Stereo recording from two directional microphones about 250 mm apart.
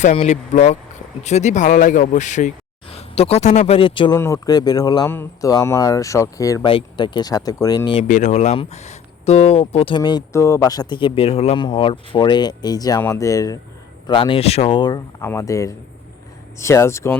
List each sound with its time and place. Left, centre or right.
0.0 s speech: left
8.0 s speech: left; by 17.2 s centre